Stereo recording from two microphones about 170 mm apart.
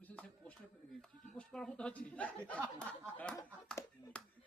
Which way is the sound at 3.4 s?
20° left (ahead or behind).